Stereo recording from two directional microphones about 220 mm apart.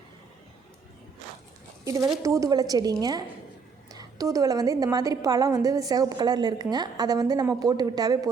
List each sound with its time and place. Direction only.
1.8 s a woman's voice: 15° right (ahead or behind)